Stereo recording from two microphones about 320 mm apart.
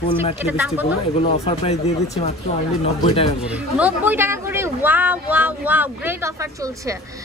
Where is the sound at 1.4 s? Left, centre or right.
Centre.